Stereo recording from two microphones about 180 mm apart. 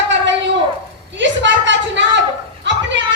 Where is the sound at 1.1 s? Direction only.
85° right.